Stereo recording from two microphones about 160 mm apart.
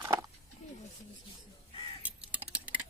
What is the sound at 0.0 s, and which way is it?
Wild animals, 20° right (ahead or behind).